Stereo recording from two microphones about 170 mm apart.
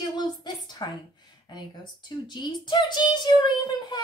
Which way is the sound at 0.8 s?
25° left (ahead or behind).